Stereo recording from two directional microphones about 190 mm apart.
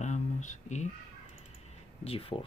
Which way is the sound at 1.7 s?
30° left (ahead or behind).